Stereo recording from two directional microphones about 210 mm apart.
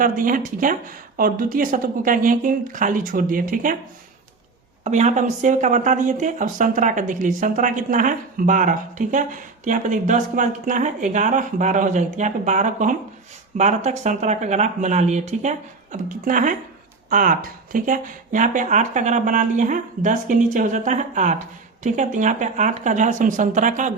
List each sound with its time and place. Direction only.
0.0 s speech: 40° right (ahead or behind)
4.8 s speech: 35° right (ahead or behind)